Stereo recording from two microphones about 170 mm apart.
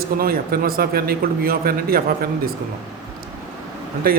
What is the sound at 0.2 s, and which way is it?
A man's voice, 60° right (ahead or behind).